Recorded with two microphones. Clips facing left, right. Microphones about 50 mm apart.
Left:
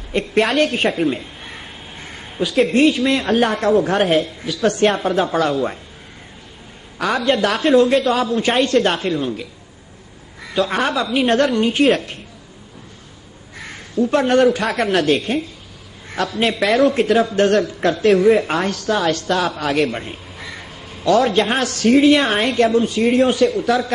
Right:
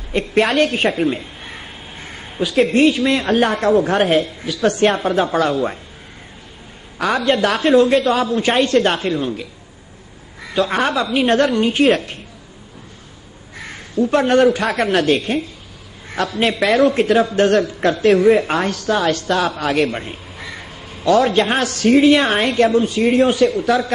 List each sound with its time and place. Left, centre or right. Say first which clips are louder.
0.1 s a woman's voice: right 1 dB; centre
7.2 s a woman's voice: right 1 dB; centre
13.7 s a woman's voice: right 1 dB; centre